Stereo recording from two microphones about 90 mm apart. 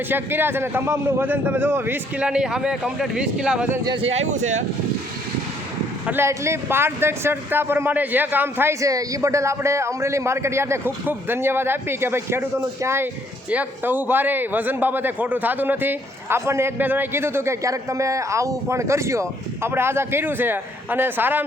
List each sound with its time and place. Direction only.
0.1 s a man's voice: 25° right (ahead or behind)
2.2 s a man's voice: 10° right (ahead or behind)
3.8 s speech: 70° right (ahead or behind)
6.1 s a man's voice: 30° right (ahead or behind)
8.8 s a man's voice: 40° right (ahead or behind); by 21.4 s 20° right (ahead or behind)